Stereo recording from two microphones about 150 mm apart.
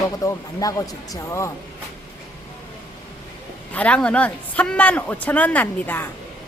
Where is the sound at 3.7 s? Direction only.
10° left (ahead or behind).